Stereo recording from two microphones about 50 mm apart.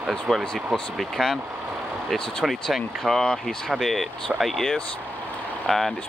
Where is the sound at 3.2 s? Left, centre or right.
Centre.